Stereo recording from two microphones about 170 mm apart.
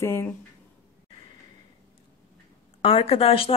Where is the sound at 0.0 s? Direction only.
15° left (ahead or behind).